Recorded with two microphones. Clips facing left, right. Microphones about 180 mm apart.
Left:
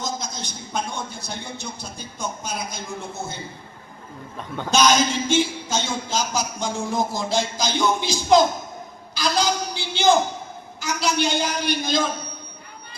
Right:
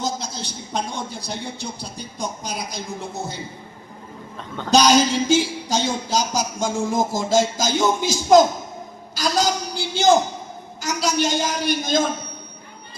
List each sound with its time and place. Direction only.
0.0 s a man's voice: 30° right (ahead or behind)
4.4 s a woman's voice: 10° left (ahead or behind)
4.7 s a man's voice: 35° right (ahead or behind)